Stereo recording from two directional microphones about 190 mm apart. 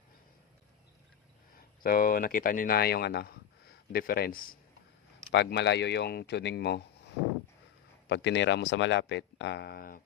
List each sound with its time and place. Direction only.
1.5 s speech: 50° left (ahead or behind)
5.3 s speech: 65° left (ahead or behind)
8.1 s speech: 70° left (ahead or behind); by 10.0 s 50° left (ahead or behind)